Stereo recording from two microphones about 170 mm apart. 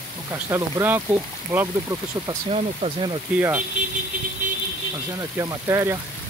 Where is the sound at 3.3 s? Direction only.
10° right (ahead or behind).